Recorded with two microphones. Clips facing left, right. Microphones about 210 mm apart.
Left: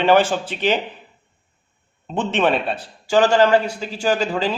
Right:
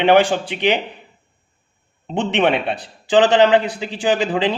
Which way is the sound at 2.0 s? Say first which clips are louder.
Right 2 dB; 15° right (ahead or behind).